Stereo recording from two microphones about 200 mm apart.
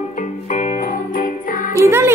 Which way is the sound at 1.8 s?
10° right (ahead or behind).